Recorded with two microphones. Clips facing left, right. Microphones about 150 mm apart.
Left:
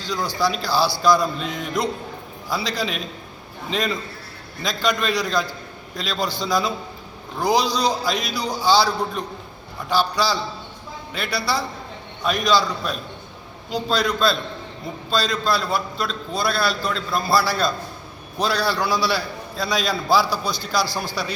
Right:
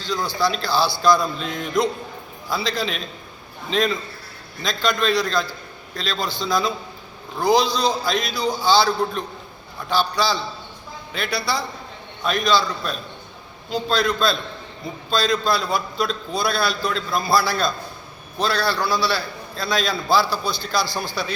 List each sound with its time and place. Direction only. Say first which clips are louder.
0.0 s a man's voice: even; 10° left (ahead or behind)